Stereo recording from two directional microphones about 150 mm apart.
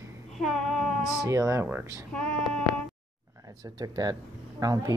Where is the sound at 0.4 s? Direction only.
Centre (ahead or behind).